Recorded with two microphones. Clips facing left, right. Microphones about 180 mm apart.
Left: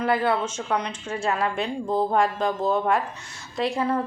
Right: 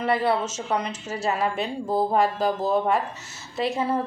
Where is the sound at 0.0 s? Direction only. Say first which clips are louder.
Even; centre (ahead or behind).